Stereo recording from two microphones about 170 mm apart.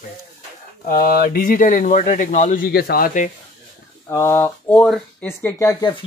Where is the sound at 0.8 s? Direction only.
60° left (ahead or behind).